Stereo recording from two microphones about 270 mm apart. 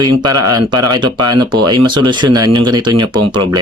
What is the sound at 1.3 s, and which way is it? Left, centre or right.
Speech, centre.